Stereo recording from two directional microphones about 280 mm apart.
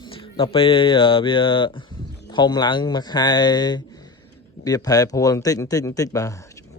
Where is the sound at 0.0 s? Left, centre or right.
Centre.